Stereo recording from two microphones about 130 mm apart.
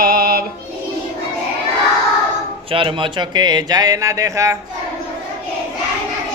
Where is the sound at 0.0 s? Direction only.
90° right.